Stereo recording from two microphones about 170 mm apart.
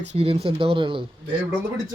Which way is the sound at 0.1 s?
40° right (ahead or behind).